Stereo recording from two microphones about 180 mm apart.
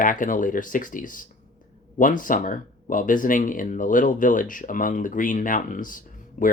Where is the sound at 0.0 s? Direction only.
50° left (ahead or behind).